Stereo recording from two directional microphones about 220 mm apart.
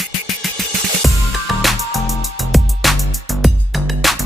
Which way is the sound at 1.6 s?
Centre (ahead or behind).